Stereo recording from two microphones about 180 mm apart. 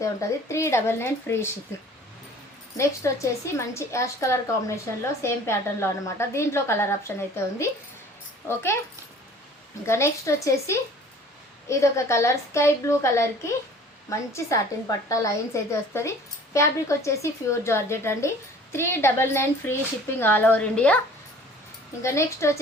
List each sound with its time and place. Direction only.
0.0 s a woman's voice: 15° left (ahead or behind)
2.7 s a woman's voice: 15° left (ahead or behind)
8.4 s a woman's voice: 15° left (ahead or behind)
9.8 s a woman's voice: 15° left (ahead or behind)
22.0 s a woman's voice: 15° left (ahead or behind)